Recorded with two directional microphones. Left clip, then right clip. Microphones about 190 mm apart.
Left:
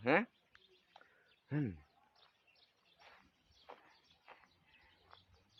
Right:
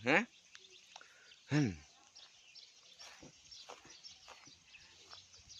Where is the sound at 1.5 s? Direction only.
20° right (ahead or behind).